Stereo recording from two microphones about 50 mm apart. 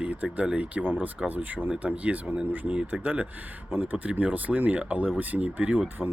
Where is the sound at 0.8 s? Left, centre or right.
Right.